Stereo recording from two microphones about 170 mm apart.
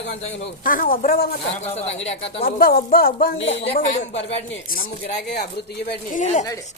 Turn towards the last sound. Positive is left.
turn(degrees=45)  # may be behind; listen again after turning